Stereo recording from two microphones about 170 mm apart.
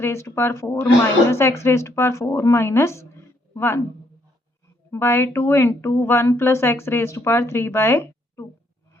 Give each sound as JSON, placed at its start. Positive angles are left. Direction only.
{"t": 0.0, "sound": "a woman's voice", "side_deg": 15}
{"t": 4.9, "sound": "speech", "side_deg": 15}